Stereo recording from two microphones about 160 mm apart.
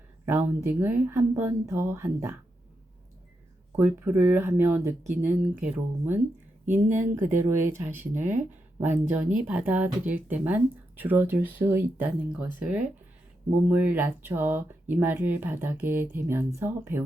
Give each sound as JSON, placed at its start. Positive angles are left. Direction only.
{"t": 0.3, "sound": "speech", "side_deg": -10}
{"t": 3.8, "sound": "speech", "side_deg": -15}